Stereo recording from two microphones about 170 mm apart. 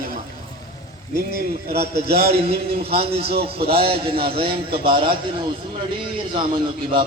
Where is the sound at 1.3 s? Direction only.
65° right (ahead or behind).